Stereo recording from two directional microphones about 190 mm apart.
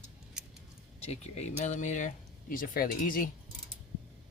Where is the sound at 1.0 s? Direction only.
35° left (ahead or behind).